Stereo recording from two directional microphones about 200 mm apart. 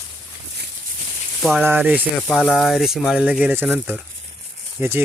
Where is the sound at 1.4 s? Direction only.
Centre (ahead or behind).